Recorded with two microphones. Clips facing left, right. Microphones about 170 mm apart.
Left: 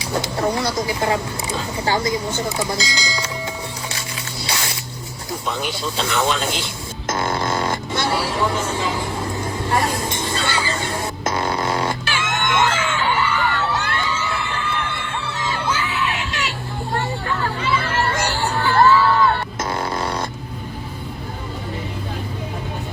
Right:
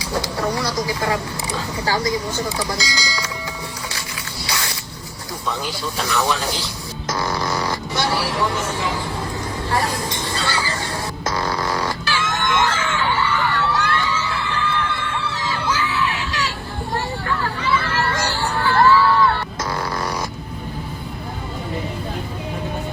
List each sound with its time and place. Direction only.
0.0 s speech: 25° left (ahead or behind)
4.4 s squish: 25° left (ahead or behind)
5.5 s speech: 25° left (ahead or behind)
7.1 s a sound: 25° left (ahead or behind)
9.6 s a sound: 25° left (ahead or behind)
15.4 s crowd: 25° left (ahead or behind)
19.7 s fart: 25° left (ahead or behind)